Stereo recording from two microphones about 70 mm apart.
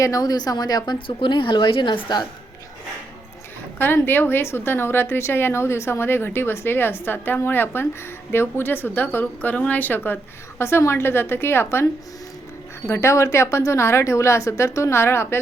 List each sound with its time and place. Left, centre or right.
0.0 s a woman's voice: left
1.5 s a woman's voice: left
3.8 s a woman's voice: left
10.6 s a woman's voice: left
12.9 s a woman's voice: left